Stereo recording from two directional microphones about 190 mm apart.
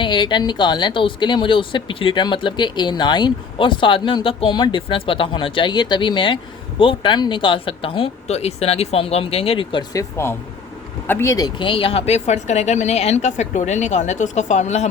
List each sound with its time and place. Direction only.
0.0 s speech: 25° left (ahead or behind)